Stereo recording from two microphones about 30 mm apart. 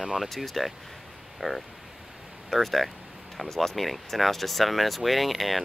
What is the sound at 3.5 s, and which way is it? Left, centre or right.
Speech, centre.